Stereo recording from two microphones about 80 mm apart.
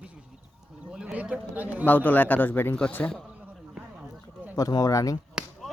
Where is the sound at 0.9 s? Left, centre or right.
Centre.